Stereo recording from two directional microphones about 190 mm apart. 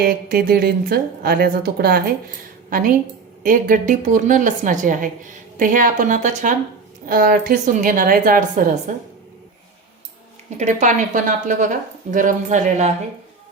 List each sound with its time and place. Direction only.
0.0 s a woman's voice: 50° right (ahead or behind)
10.6 s a woman's voice: 40° right (ahead or behind)